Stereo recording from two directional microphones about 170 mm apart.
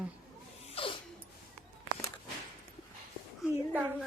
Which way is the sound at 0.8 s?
35° left (ahead or behind).